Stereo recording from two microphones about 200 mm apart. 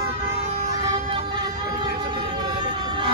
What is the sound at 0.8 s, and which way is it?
Vehicle, 20° right (ahead or behind).